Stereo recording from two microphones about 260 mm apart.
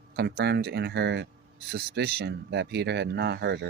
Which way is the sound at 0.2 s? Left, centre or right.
Right.